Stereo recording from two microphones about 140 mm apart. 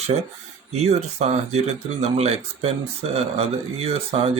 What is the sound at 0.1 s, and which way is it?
Speech, 50° right (ahead or behind).